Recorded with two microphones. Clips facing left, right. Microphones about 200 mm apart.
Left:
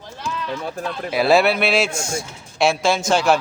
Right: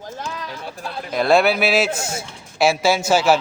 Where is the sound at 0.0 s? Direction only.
40° right (ahead or behind).